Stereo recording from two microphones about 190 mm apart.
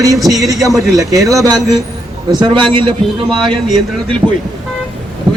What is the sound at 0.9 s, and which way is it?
A man's voice, 15° right (ahead or behind).